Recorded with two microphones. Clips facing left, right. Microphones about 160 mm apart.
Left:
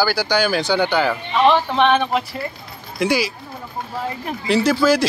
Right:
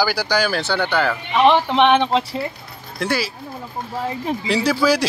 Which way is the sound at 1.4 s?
20° right (ahead or behind).